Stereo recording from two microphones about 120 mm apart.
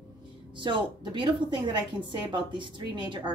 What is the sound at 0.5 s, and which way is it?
Speech, 40° right (ahead or behind).